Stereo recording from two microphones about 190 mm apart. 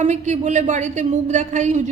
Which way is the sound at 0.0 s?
40° right (ahead or behind).